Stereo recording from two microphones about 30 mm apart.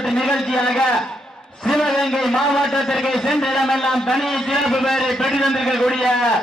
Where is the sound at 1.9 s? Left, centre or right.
Centre.